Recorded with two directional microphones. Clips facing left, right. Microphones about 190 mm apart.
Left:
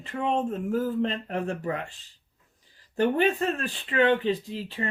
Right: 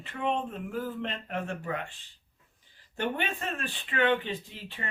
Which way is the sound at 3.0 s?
40° left (ahead or behind).